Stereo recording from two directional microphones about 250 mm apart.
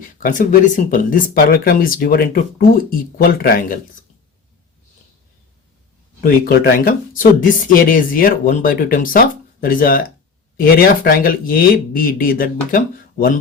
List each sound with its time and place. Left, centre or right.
0.2 s speech: left
6.2 s speech: left